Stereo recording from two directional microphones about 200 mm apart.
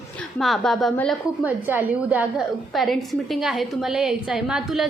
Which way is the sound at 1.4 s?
10° right (ahead or behind).